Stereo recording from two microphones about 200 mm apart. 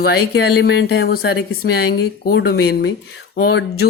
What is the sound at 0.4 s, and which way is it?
Speech, 55° left (ahead or behind).